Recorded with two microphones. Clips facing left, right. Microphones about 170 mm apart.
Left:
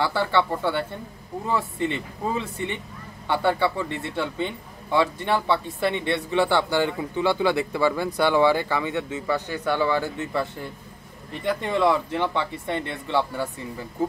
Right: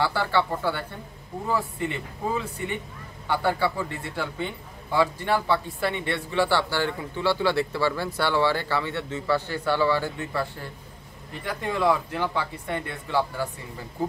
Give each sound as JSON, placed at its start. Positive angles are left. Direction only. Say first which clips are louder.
{"t": 0.0, "sound": "speech", "louder": "left 2 dB", "side_deg": 20}